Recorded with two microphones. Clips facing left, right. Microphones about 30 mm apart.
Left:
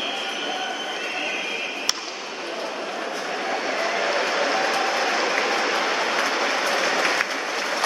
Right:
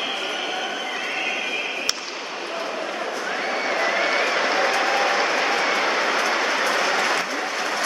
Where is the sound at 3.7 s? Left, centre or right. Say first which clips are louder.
Right 3 dB; centre.